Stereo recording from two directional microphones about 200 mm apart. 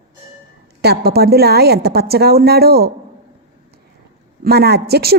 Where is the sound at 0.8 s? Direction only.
50° right (ahead or behind).